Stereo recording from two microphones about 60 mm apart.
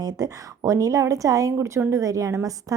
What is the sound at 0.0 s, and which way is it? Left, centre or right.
Speech, right.